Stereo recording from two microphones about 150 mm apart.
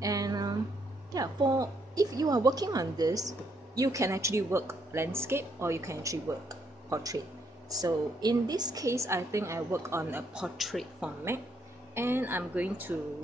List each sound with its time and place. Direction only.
0.0 s a sound: 25° right (ahead or behind)
1.1 s a woman's voice: 25° right (ahead or behind)
10.3 s a man's voice: 5° right (ahead or behind)
11.9 s speech: 15° right (ahead or behind)